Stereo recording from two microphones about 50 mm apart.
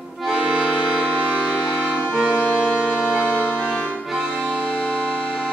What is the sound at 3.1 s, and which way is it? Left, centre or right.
Music, left.